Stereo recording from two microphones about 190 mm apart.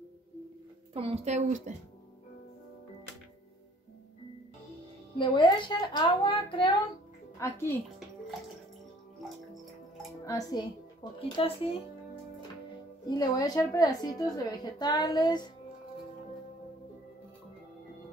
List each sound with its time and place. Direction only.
0.9 s a woman's voice: 30° right (ahead or behind)
5.1 s a woman's voice: 25° left (ahead or behind)
7.3 s a woman's voice: 15° left (ahead or behind)
10.2 s a woman's voice: 20° left (ahead or behind)
13.0 s a woman's voice: 20° left (ahead or behind)